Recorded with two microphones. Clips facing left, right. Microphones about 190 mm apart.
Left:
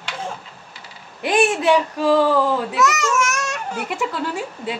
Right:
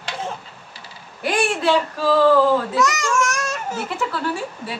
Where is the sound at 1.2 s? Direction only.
20° left (ahead or behind).